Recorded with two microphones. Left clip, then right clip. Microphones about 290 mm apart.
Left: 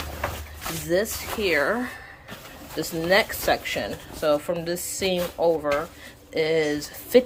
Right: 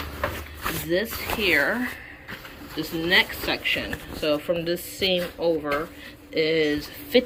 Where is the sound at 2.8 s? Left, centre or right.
Left.